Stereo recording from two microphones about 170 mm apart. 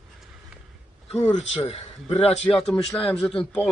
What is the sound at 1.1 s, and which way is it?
A man's voice, 40° left (ahead or behind).